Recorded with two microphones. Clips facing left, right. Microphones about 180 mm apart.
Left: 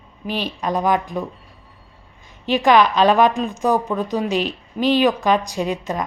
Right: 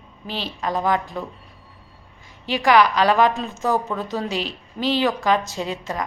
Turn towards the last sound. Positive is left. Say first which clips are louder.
# left 4 dB
turn(degrees=20)  # may be behind; listen again after turning